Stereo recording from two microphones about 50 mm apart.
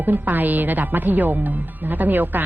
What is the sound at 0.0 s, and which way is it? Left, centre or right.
A woman's voice, right.